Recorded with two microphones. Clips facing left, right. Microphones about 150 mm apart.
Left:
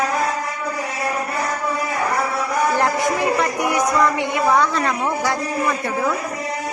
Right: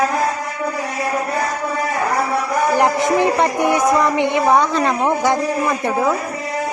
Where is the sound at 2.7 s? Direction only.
20° right (ahead or behind).